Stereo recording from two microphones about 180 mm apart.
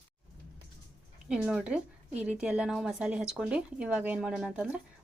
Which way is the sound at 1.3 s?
5° right (ahead or behind).